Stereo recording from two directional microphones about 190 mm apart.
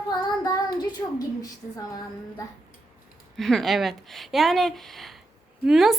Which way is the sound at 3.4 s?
Centre (ahead or behind).